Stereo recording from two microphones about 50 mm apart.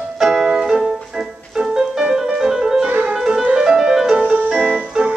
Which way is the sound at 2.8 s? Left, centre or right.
Right.